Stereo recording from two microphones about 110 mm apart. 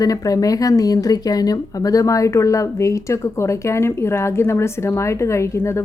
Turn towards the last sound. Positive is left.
turn(degrees=25)  # may be behind; listen again after turning